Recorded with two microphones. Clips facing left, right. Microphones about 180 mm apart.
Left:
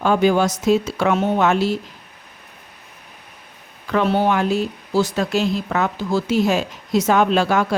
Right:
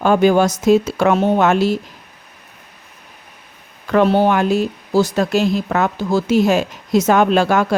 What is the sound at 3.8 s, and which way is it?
Speech, 45° right (ahead or behind).